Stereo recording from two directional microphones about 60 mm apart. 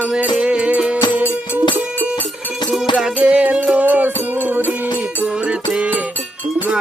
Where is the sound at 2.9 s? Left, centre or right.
Centre.